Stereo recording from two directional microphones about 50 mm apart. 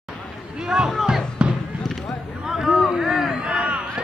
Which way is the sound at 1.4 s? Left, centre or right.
Centre.